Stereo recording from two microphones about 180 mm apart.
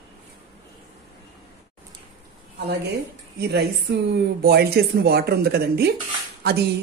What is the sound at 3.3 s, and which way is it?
Speech, 65° right (ahead or behind).